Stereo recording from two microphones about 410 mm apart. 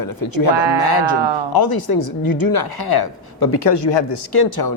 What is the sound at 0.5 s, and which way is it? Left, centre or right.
Speech, right.